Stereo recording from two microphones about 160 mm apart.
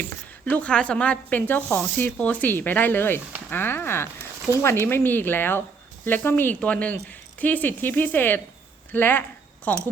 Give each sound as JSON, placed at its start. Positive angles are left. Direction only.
{"t": 0.5, "sound": "speech", "side_deg": 5}